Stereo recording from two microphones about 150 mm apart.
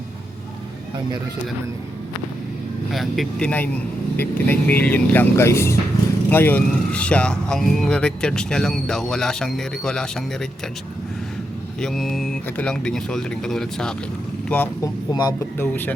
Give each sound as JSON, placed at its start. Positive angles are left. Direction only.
{"t": 2.9, "sound": "speech", "side_deg": 0}
{"t": 11.8, "sound": "speech", "side_deg": 0}
{"t": 15.1, "sound": "speech", "side_deg": 25}
{"t": 15.5, "sound": "speech", "side_deg": 15}